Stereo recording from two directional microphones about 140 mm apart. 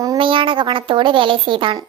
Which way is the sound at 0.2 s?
40° right (ahead or behind).